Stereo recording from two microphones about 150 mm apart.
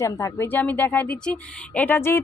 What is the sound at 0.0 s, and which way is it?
A woman's voice, 20° left (ahead or behind).